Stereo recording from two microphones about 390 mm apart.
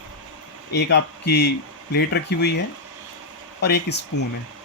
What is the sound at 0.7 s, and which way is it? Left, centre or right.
A man's voice, left.